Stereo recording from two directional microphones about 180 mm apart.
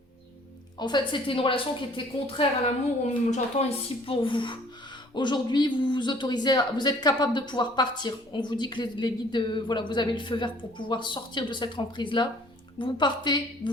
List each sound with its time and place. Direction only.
0.8 s a man's voice: 25° left (ahead or behind)